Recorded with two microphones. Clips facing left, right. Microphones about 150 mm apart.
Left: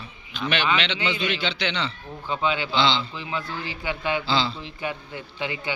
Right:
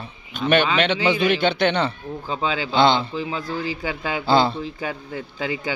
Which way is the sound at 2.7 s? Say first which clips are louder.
Right 6 dB; 50° right (ahead or behind).